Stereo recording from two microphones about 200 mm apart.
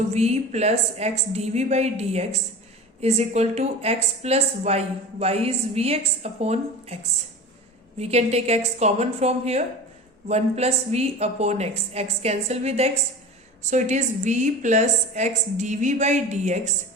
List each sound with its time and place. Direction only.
0.1 s a woman's voice: 35° right (ahead or behind)